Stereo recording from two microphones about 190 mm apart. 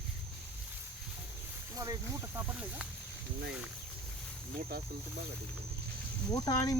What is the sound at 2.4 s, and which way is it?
Speech, 5° right (ahead or behind).